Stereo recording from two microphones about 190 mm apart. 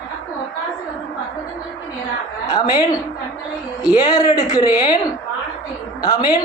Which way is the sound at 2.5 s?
20° left (ahead or behind).